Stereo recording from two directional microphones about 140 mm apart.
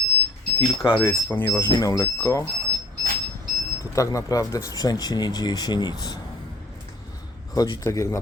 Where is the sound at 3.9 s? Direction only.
25° left (ahead or behind).